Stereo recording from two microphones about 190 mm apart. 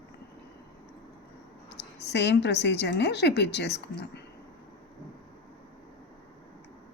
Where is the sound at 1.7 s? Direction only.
65° left (ahead or behind).